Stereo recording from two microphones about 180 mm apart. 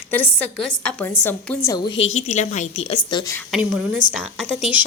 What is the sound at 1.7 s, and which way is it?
Speech, 25° left (ahead or behind).